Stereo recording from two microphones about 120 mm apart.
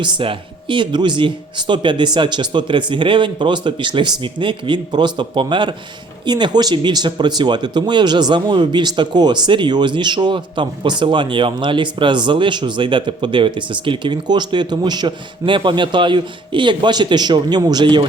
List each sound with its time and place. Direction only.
0.0 s speech: 45° right (ahead or behind)